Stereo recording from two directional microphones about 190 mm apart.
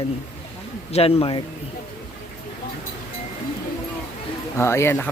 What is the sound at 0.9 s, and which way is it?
Speech, 30° left (ahead or behind).